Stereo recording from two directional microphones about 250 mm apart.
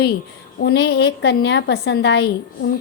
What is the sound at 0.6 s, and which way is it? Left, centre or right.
A woman's voice, left.